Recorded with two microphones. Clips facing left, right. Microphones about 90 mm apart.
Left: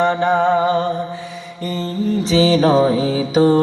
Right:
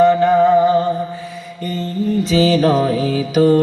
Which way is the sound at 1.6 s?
25° left (ahead or behind).